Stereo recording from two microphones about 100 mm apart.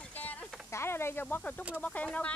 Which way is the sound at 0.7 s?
25° left (ahead or behind).